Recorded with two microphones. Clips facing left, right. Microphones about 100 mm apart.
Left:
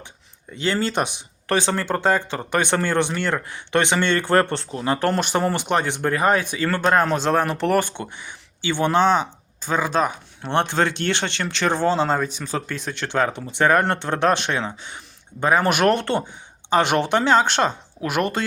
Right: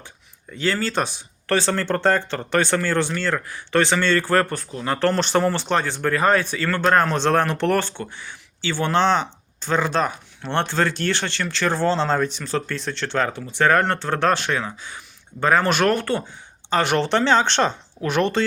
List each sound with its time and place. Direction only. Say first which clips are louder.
0.5 s speech: even; 20° left (ahead or behind)
4.9 s speech: right 1 dB; 15° left (ahead or behind)
7.9 s speech: even; 20° left (ahead or behind)
15.4 s speech: even; 15° left (ahead or behind)